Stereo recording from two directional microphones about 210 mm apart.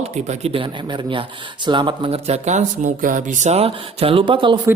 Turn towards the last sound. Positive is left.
turn(degrees=-25)  # may be behind; listen again after turning